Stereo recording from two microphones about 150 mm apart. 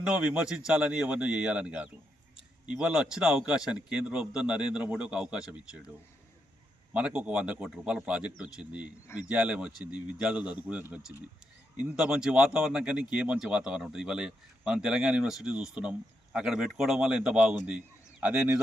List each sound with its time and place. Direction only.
0.1 s a man's voice: 5° right (ahead or behind)
6.9 s a man's voice: 10° right (ahead or behind)
11.1 s speech: 25° right (ahead or behind)
11.8 s a man's voice: 5° right (ahead or behind)